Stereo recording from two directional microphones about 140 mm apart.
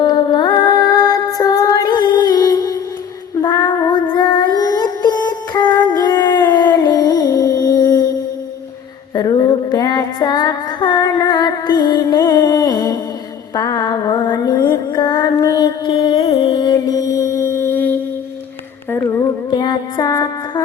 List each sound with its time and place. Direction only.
0.0 s music: 30° left (ahead or behind)
3.4 s child singing: 30° left (ahead or behind)
9.1 s female singing: 25° left (ahead or behind)
13.5 s music: 25° left (ahead or behind)
18.9 s a sound: 20° left (ahead or behind)
19.5 s music: 30° left (ahead or behind)